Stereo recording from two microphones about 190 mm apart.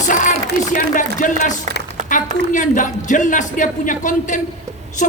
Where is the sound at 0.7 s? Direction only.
45° left (ahead or behind).